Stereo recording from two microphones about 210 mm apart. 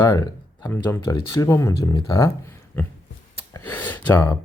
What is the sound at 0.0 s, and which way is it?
Speech, 15° left (ahead or behind).